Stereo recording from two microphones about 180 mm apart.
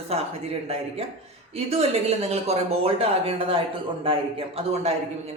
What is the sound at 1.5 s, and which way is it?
Speech, 35° right (ahead or behind).